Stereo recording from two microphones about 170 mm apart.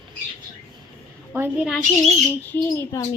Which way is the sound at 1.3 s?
10° right (ahead or behind).